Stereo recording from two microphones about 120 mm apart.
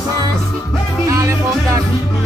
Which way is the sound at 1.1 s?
25° right (ahead or behind).